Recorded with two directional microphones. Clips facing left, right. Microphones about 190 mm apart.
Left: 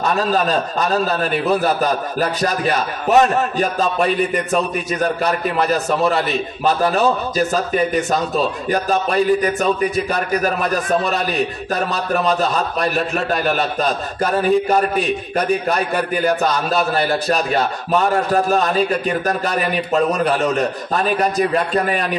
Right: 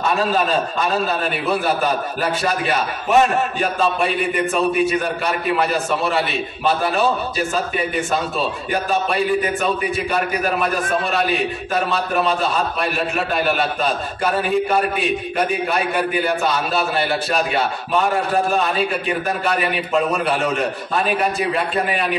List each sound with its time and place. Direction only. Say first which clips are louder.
0.1 s a man's voice: left 1 dB; 40° left (ahead or behind)